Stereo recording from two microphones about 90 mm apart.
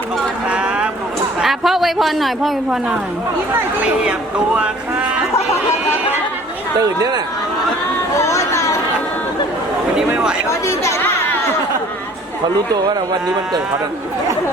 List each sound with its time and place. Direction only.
0.4 s vehicle: 10° right (ahead or behind)
1.4 s a woman's voice: centre (ahead or behind)
6.7 s speech: 45° right (ahead or behind)
8.2 s chatter: 35° left (ahead or behind)
10.7 s speech: 35° left (ahead or behind)